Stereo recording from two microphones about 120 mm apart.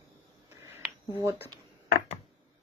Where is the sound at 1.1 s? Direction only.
25° right (ahead or behind).